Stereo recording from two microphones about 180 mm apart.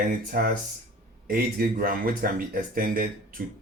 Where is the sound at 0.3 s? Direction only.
55° right (ahead or behind).